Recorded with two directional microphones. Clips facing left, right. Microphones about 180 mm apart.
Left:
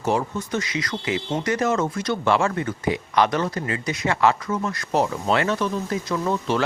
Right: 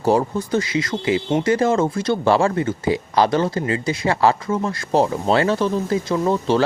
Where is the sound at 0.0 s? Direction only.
35° right (ahead or behind).